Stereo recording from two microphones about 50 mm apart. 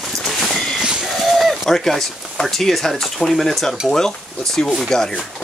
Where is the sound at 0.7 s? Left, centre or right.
Centre.